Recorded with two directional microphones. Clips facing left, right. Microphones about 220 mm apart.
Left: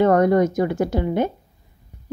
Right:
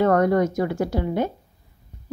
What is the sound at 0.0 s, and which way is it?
A woman's voice, 20° left (ahead or behind).